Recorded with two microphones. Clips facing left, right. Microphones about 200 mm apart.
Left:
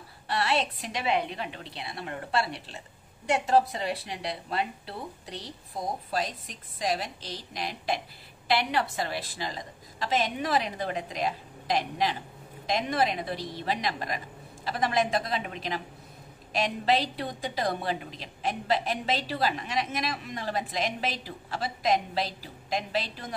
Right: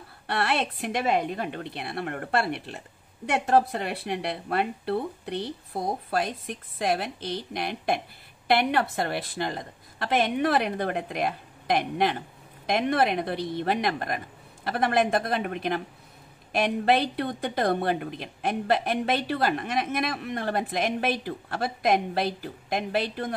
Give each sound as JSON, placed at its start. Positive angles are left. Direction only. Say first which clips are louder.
{"t": 0.3, "sound": "a woman's voice", "louder": "right 1 dB", "side_deg": -60}